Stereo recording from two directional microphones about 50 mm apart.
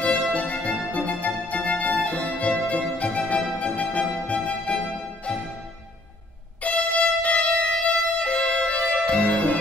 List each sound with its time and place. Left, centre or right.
0.0 s music: left
6.6 s music: left
8.2 s violin: left
9.0 s music: left